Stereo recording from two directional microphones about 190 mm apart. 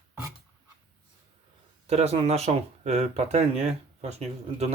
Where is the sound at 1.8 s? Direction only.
35° right (ahead or behind).